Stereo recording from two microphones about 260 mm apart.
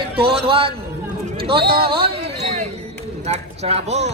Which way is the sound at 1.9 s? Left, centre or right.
Right.